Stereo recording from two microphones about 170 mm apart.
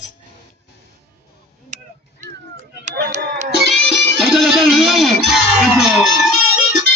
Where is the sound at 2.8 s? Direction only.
45° right (ahead or behind).